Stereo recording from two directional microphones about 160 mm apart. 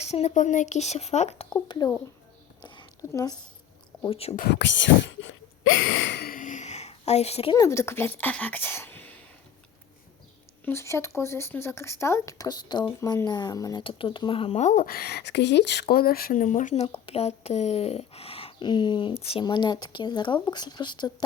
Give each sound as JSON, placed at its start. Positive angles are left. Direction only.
{"t": 0.0, "sound": "speech", "side_deg": 45}
{"t": 1.6, "sound": "speech", "side_deg": 25}
{"t": 3.1, "sound": "speech", "side_deg": 20}
{"t": 4.0, "sound": "speech", "side_deg": 35}
{"t": 4.4, "sound": "speech", "side_deg": 90}
{"t": 6.1, "sound": "a sound", "side_deg": 80}
{"t": 7.5, "sound": "speech", "side_deg": 20}
{"t": 10.7, "sound": "speech", "side_deg": 15}